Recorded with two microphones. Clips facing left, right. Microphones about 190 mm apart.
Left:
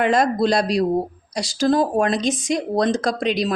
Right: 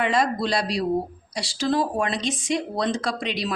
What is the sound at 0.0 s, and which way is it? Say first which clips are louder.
Speech: left 5 dB; 45° left (ahead or behind).